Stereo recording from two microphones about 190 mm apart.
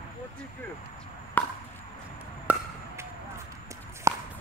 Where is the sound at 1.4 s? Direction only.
10° left (ahead or behind).